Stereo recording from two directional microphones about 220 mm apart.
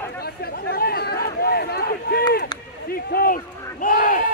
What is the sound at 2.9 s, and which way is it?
Run, 45° left (ahead or behind).